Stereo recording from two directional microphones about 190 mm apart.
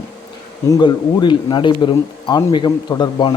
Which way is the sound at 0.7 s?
25° left (ahead or behind).